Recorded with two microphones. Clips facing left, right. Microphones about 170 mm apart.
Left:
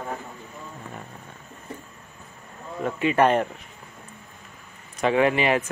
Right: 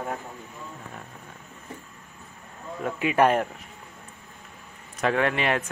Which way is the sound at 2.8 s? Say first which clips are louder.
Left 1 dB; 5° right (ahead or behind).